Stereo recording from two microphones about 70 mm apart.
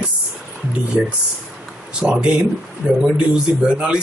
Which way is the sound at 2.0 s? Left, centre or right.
Centre.